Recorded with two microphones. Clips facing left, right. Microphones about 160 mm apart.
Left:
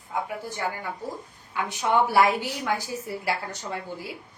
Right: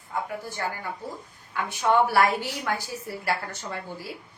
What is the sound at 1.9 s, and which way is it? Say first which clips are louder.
A woman's voice: even; 15° left (ahead or behind).